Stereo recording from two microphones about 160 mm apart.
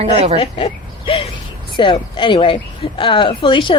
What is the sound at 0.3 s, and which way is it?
Speech, 40° left (ahead or behind).